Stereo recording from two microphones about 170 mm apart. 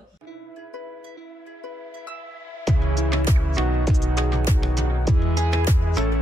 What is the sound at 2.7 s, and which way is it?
Music, centre (ahead or behind).